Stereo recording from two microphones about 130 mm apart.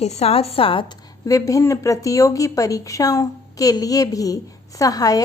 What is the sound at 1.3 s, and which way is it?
A woman's voice, 25° left (ahead or behind).